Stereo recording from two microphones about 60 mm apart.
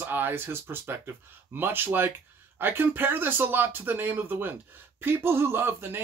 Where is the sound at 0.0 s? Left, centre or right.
Right.